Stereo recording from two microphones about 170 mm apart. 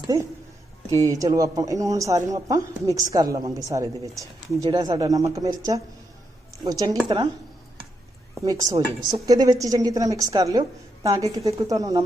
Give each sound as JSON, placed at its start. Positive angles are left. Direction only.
{"t": 1.0, "sound": "speech", "side_deg": -20}
{"t": 8.4, "sound": "speech", "side_deg": -20}